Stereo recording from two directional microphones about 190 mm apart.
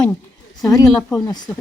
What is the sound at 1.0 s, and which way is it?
Speech, centre (ahead or behind).